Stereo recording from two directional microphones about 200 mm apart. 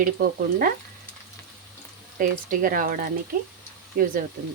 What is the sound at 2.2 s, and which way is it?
Speech, 40° right (ahead or behind).